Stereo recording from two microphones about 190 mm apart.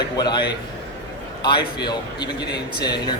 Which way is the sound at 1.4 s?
20° left (ahead or behind).